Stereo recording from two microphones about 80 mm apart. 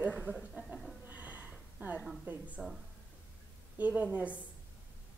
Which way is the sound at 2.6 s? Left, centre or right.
Centre.